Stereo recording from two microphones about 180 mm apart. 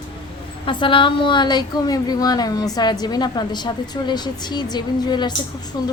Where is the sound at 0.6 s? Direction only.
30° left (ahead or behind).